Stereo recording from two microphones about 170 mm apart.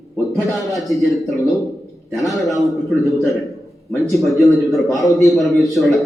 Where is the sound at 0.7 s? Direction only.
Centre (ahead or behind).